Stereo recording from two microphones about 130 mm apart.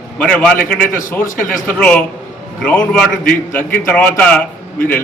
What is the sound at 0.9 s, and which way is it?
Speech, 90° left.